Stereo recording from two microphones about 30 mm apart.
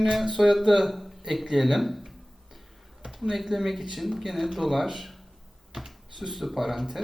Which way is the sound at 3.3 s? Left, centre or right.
Centre.